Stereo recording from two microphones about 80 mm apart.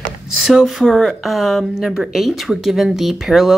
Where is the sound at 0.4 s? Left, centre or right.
Centre.